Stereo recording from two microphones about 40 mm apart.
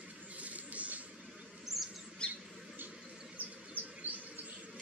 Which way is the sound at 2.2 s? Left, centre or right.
Left.